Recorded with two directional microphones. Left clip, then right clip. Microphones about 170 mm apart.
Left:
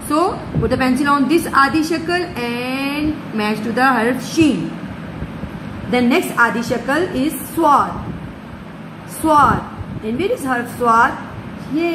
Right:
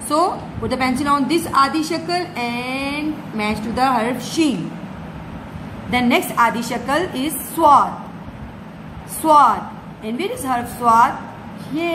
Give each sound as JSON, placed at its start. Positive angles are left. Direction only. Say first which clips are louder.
{"t": 0.1, "sound": "a woman's voice", "louder": "left 1 dB", "side_deg": 15}
{"t": 5.9, "sound": "a woman's voice", "louder": "left 1 dB", "side_deg": 10}
{"t": 9.2, "sound": "a woman's voice", "louder": "even", "side_deg": 0}